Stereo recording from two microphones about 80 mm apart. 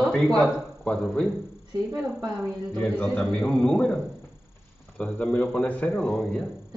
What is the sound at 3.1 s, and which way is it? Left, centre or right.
Speech, centre.